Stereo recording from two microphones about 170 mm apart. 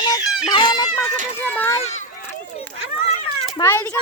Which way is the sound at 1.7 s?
40° left (ahead or behind).